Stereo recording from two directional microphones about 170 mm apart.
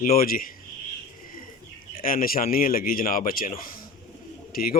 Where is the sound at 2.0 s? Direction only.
55° left (ahead or behind).